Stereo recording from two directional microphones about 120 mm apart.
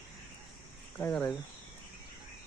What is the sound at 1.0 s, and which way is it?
Speech, 20° left (ahead or behind).